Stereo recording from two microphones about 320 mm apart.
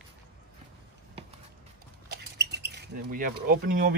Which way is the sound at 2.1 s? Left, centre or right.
Right.